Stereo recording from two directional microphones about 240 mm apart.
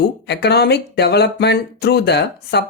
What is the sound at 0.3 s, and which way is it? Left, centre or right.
Speech, left.